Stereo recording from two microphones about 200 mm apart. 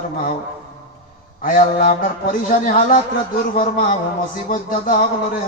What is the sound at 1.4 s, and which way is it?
A man's voice, 45° left (ahead or behind).